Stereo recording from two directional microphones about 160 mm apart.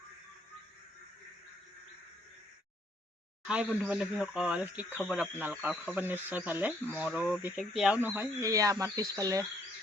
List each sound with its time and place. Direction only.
3.4 s speech: 5° right (ahead or behind)
8.0 s speech: 15° right (ahead or behind)